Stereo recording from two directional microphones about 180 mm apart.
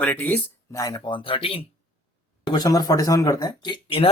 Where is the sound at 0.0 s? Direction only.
10° left (ahead or behind).